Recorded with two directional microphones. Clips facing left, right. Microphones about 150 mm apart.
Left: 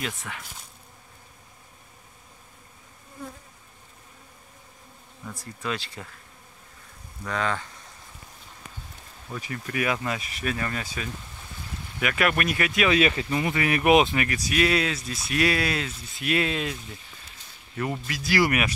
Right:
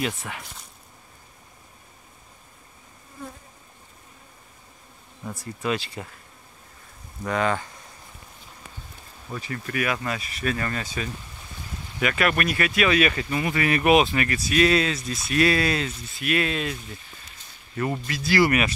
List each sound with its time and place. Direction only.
5.6 s speech: 15° right (ahead or behind)
7.2 s speech: 10° right (ahead or behind)
9.4 s speech: 15° left (ahead or behind)
16.2 s speech: 20° left (ahead or behind)
17.7 s speech: 5° left (ahead or behind)